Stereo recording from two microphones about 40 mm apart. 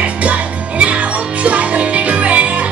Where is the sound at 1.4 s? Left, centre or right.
Right.